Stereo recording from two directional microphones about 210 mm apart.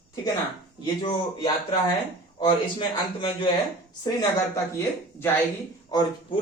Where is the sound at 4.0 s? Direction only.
15° left (ahead or behind).